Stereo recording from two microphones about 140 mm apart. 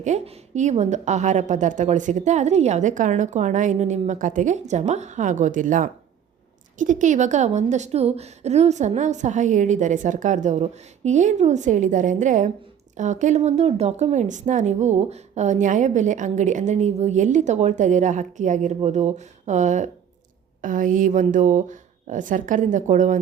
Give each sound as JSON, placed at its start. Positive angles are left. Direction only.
{"t": 0.0, "sound": "a woman's voice", "side_deg": -60}
{"t": 20.6, "sound": "a woman's voice", "side_deg": -70}